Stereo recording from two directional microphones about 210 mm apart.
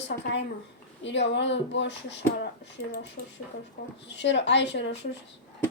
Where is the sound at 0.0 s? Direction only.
55° left (ahead or behind).